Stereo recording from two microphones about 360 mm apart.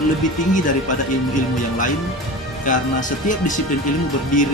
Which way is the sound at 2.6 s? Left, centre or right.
Left.